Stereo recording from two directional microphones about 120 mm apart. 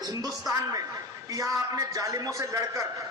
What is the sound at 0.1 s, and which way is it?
A man's voice, 30° right (ahead or behind).